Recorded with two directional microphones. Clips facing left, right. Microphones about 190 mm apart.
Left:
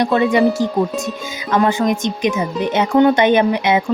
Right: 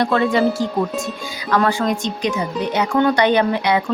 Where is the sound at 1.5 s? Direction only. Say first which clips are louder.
Left 2 dB; 20° left (ahead or behind).